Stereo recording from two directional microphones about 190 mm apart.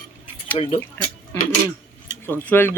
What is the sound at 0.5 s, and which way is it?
Speech, 30° left (ahead or behind).